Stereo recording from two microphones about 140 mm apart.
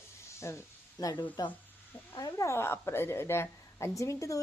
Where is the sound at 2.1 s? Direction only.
25° left (ahead or behind).